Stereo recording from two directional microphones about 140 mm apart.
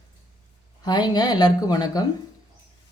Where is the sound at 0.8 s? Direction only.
30° left (ahead or behind).